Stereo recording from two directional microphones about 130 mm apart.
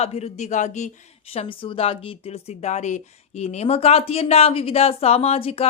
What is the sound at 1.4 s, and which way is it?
Speech, 45° left (ahead or behind).